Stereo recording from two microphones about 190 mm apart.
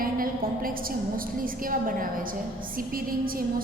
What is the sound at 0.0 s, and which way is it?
A woman's voice, 50° right (ahead or behind).